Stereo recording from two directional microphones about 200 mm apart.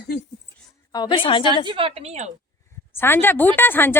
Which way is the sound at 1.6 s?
25° right (ahead or behind).